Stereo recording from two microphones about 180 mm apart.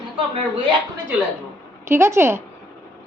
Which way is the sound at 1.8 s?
15° right (ahead or behind).